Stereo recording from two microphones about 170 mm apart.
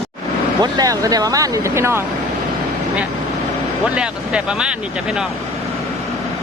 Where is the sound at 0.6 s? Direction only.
20° right (ahead or behind).